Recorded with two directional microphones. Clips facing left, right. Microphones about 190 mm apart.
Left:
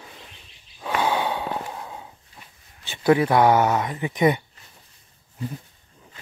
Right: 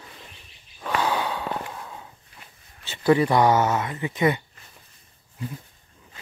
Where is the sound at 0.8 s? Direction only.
20° left (ahead or behind).